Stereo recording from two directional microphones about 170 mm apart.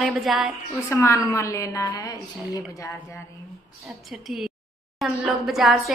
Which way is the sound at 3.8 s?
Centre (ahead or behind).